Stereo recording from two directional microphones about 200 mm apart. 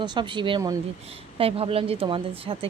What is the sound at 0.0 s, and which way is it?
Speech, 25° right (ahead or behind).